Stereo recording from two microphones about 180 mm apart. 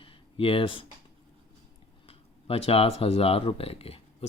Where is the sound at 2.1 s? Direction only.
30° left (ahead or behind).